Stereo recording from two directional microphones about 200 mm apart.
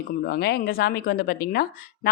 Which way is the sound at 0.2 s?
50° left (ahead or behind).